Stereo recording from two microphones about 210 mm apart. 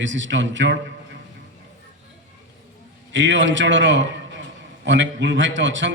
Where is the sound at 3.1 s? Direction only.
60° right (ahead or behind).